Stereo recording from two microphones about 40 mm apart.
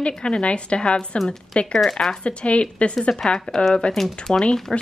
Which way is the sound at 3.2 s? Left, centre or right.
Centre.